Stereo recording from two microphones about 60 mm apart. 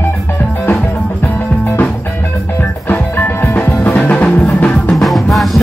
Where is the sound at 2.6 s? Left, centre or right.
Left.